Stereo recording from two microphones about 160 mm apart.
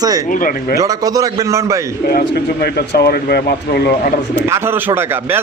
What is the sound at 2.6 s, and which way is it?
Speech, 75° left (ahead or behind).